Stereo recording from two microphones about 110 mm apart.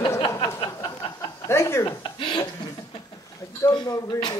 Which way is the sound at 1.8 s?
45° left (ahead or behind).